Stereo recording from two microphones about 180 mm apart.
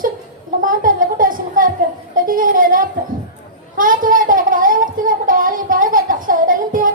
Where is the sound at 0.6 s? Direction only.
50° right (ahead or behind).